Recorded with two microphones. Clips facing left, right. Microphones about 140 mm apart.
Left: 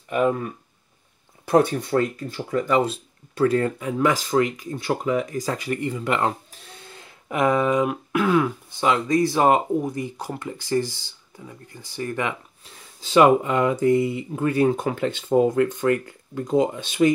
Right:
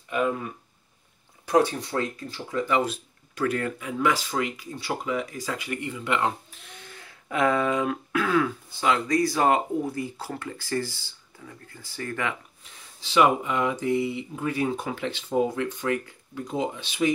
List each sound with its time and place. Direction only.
1.5 s speech: 55° left (ahead or behind)
2.8 s speech: 30° left (ahead or behind)
13.0 s speech: 50° left (ahead or behind)